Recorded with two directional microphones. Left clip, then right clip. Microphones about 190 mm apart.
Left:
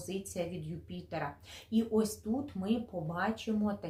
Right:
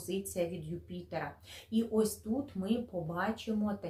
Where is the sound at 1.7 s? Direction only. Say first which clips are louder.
Even; 15° left (ahead or behind).